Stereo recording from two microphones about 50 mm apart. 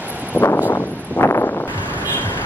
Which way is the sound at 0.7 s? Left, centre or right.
Left.